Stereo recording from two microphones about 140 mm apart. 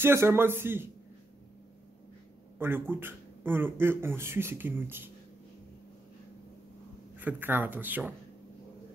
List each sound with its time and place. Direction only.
0.0 s speech: 20° right (ahead or behind)
2.6 s speech: 15° right (ahead or behind)
7.2 s speech: 15° right (ahead or behind)